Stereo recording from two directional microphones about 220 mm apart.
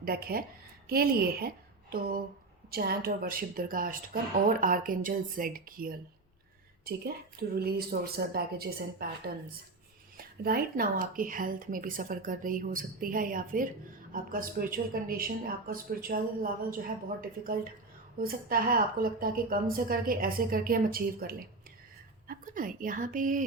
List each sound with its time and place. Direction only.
0.0 s a woman's voice: 45° right (ahead or behind)